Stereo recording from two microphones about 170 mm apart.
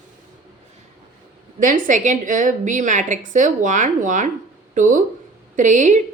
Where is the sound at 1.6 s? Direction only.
50° right (ahead or behind).